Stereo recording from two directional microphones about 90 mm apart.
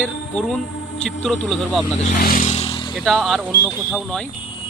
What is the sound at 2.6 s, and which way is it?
Motorcycle, 80° left.